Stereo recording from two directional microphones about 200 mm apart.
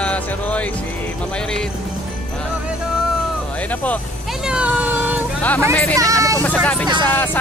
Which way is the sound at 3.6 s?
5° left (ahead or behind).